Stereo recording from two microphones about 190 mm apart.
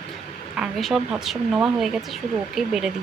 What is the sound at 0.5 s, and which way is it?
Speech, centre (ahead or behind).